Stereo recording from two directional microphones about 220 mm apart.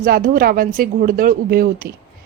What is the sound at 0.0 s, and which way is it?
Speech, 40° right (ahead or behind).